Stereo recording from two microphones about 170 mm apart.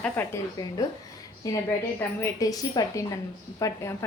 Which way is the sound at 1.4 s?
20° left (ahead or behind).